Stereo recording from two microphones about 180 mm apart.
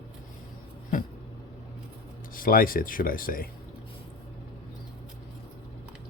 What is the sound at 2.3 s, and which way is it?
Speech, 50° left (ahead or behind).